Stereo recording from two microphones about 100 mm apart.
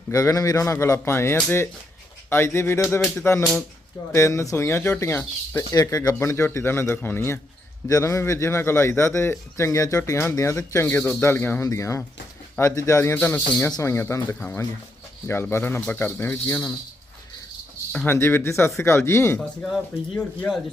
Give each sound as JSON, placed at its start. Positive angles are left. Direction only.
{"t": 0.1, "sound": "a man's voice", "side_deg": 35}
{"t": 13.1, "sound": "a man's voice", "side_deg": 15}
{"t": 13.7, "sound": "a man's voice", "side_deg": 40}
{"t": 13.9, "sound": "a man's voice", "side_deg": 25}
{"t": 17.9, "sound": "a man's voice", "side_deg": 20}